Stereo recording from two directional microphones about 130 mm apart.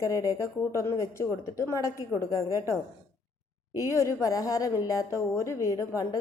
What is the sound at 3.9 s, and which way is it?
Speech, 20° left (ahead or behind).